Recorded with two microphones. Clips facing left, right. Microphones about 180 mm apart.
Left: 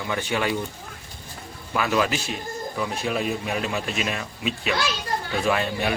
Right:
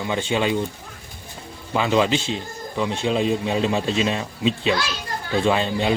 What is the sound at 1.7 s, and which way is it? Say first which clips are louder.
Speech: right 4 dB; 25° right (ahead or behind).